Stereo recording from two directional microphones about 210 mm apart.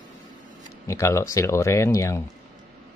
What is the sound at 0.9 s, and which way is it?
Speech, 15° left (ahead or behind).